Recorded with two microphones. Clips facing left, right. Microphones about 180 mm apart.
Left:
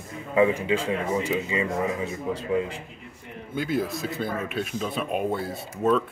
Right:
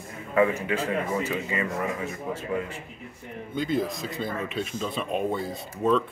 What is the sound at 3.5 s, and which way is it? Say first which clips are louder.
A man's voice: even; 5° left (ahead or behind).